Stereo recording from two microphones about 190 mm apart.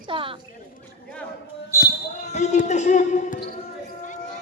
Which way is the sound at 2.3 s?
35° left (ahead or behind).